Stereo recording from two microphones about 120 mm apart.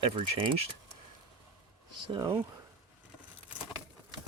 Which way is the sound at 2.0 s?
35° right (ahead or behind).